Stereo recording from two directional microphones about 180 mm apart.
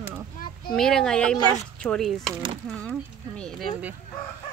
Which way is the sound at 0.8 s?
5° left (ahead or behind).